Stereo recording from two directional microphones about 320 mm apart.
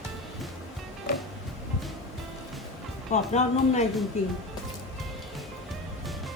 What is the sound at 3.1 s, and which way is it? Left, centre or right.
Speech, left.